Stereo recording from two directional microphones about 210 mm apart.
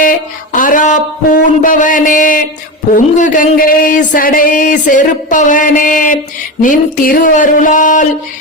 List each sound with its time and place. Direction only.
0.0 s speech: 40° left (ahead or behind)